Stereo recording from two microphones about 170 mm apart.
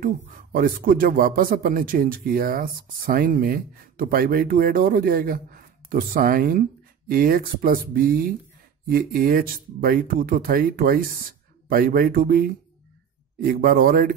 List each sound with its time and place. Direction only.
0.0 s speech: 55° right (ahead or behind)